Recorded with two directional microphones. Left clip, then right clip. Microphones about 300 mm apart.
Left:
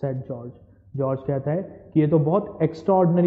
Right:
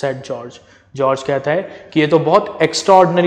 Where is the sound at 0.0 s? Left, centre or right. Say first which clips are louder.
Right 9 dB; centre.